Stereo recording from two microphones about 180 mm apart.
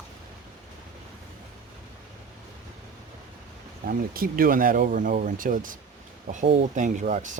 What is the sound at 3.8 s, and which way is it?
Speech, 55° right (ahead or behind).